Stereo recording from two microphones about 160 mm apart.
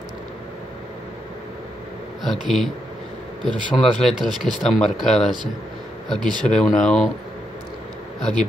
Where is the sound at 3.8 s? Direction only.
Centre (ahead or behind).